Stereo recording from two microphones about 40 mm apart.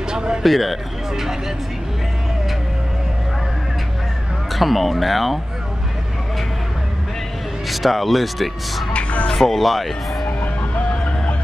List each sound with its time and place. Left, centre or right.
0.1 s a man's voice: centre
0.4 s speech: centre
4.5 s speech: centre
7.6 s speech: centre
8.9 s music: left
9.3 s speech: centre
10.2 s music: left